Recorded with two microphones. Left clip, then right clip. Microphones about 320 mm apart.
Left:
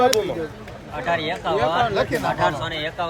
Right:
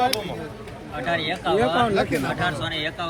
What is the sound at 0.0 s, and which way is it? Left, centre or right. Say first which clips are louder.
Speech: left 5 dB; left.